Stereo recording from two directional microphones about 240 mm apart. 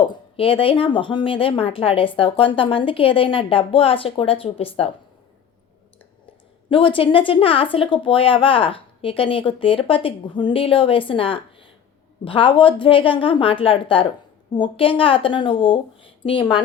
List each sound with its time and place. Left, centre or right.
0.1 s a woman's voice: left
6.7 s a woman's voice: left